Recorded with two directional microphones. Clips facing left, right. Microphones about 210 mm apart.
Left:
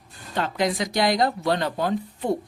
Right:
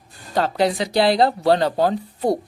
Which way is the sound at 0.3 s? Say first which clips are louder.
Right 5 dB; 35° right (ahead or behind).